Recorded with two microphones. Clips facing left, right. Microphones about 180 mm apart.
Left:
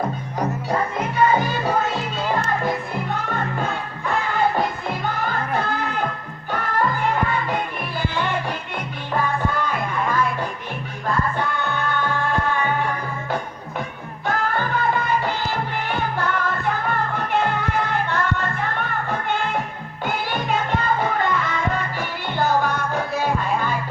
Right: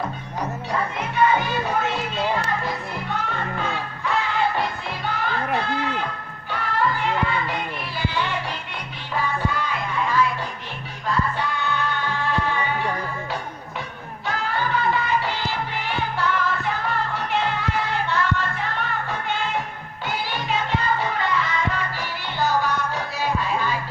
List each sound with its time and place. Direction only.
0.3 s music: 40° left (ahead or behind)
4.0 s music: 50° left (ahead or behind)
5.5 s a sound: 50° left (ahead or behind)
6.5 s music: 45° left (ahead or behind)
14.3 s music: 50° left (ahead or behind)